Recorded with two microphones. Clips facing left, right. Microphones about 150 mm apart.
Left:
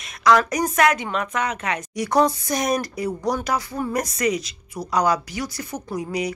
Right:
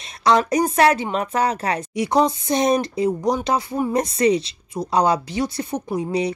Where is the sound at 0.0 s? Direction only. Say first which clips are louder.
Even; 30° right (ahead or behind).